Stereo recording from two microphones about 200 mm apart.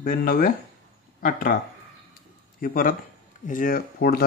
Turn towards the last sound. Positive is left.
turn(degrees=50)  # may be behind; listen again after turning